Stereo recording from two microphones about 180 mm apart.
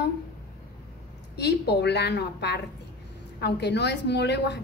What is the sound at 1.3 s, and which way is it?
A woman's voice, 65° left (ahead or behind).